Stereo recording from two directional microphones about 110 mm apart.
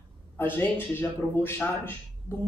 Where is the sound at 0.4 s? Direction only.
20° left (ahead or behind).